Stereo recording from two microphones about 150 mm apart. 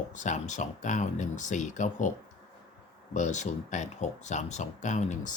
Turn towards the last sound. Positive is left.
turn(degrees=55)  # may be behind; listen again after turning